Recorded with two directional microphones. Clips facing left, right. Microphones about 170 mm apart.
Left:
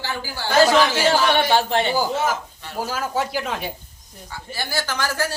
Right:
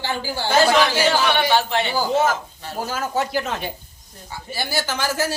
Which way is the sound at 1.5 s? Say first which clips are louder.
Left 1 dB; 45° left (ahead or behind).